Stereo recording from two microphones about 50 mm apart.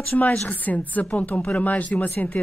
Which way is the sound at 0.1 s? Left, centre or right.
Left.